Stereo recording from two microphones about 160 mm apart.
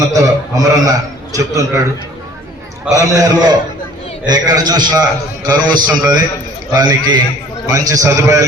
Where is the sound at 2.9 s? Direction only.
20° right (ahead or behind).